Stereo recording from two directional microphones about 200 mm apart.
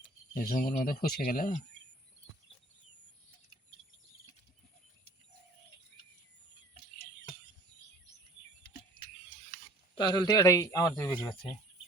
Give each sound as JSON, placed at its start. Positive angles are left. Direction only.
{"t": 0.3, "sound": "speech", "side_deg": 45}
{"t": 9.5, "sound": "stir", "side_deg": 65}
{"t": 9.9, "sound": "speech", "side_deg": 25}